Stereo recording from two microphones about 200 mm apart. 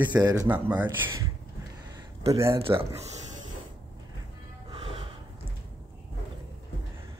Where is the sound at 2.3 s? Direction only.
15° right (ahead or behind).